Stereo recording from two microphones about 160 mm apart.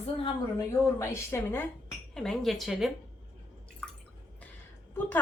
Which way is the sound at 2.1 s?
Centre (ahead or behind).